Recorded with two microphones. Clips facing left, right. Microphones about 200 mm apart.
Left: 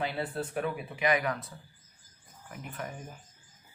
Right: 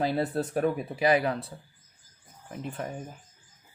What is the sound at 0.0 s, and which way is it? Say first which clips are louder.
Speech: right 6 dB; 40° right (ahead or behind).